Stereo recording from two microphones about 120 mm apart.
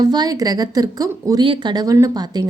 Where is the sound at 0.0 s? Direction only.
35° right (ahead or behind).